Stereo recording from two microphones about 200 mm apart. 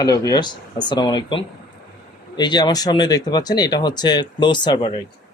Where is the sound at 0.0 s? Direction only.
20° left (ahead or behind).